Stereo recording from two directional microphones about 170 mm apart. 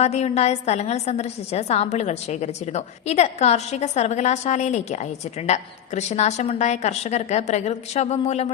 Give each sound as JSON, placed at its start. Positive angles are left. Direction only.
{"t": 0.0, "sound": "a woman's voice", "side_deg": 40}